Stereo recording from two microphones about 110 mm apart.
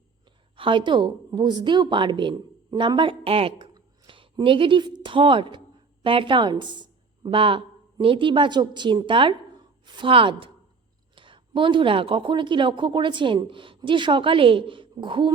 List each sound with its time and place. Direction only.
0.5 s speech: 50° right (ahead or behind)
4.0 s a woman's voice: 50° right (ahead or behind)